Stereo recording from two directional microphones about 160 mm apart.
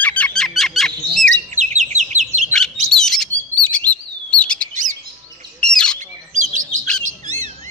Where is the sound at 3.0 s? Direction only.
5° left (ahead or behind).